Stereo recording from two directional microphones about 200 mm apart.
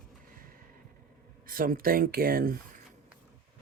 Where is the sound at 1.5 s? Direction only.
45° right (ahead or behind).